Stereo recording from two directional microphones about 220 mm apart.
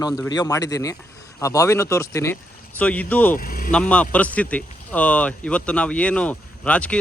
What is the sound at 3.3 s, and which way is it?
Vehicle, 40° left (ahead or behind).